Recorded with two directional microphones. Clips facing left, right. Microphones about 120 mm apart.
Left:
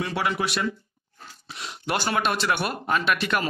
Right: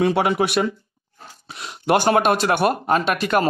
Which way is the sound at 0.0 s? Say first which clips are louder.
Right 8 dB; 55° right (ahead or behind).